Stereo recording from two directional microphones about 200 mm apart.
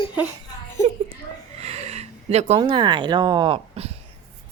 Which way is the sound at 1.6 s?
30° right (ahead or behind).